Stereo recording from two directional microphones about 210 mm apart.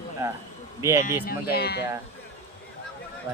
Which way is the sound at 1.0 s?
45° left (ahead or behind).